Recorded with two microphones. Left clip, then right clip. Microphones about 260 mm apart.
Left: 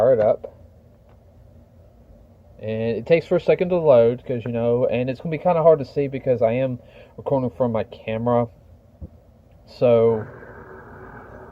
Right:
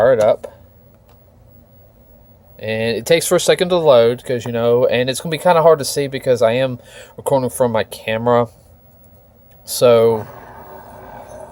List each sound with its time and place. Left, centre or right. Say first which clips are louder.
0.0 s speech: right 4 dB; right
2.6 s speech: right 5 dB; right
9.6 s speech: right 5 dB; right
10.9 s vehicle: right 6 dB; right